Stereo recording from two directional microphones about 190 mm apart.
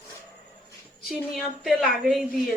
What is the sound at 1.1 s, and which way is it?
Speech, centre (ahead or behind).